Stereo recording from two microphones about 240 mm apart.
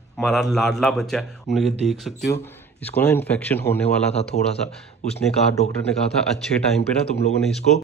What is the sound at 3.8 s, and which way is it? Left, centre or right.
Speech, left.